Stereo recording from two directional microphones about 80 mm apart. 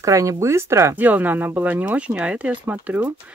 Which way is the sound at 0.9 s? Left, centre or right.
Right.